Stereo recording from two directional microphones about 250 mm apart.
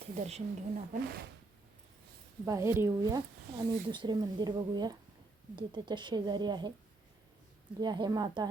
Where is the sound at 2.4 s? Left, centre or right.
Centre.